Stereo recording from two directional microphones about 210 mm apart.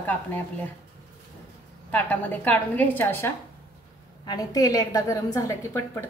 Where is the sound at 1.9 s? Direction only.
10° left (ahead or behind).